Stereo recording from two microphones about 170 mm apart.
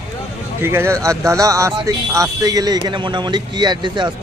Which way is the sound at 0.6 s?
15° right (ahead or behind).